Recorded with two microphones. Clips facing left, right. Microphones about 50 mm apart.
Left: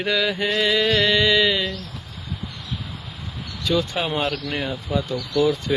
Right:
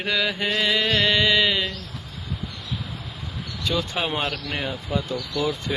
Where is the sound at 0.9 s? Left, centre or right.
Right.